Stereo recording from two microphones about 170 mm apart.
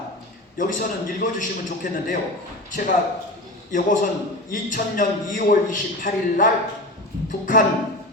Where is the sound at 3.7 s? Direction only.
50° left (ahead or behind).